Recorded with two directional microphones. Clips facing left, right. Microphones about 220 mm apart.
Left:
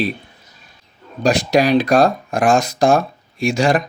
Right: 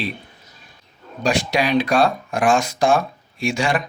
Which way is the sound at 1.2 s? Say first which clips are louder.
Left 5 dB; 40° left (ahead or behind).